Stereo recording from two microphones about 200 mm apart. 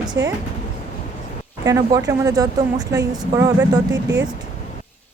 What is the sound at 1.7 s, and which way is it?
Speech, 15° right (ahead or behind).